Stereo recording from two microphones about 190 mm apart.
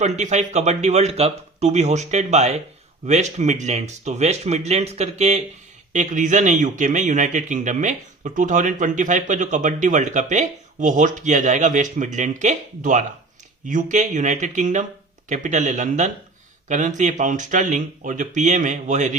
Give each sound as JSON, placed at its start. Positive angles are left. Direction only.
{"t": 0.0, "sound": "a man's voice", "side_deg": -40}